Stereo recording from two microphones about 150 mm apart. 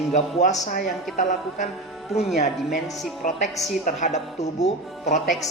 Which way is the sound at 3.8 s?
50° left (ahead or behind).